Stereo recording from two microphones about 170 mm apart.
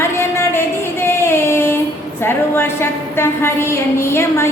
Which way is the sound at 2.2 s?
15° left (ahead or behind).